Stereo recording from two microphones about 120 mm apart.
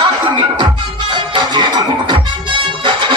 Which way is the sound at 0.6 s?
40° right (ahead or behind).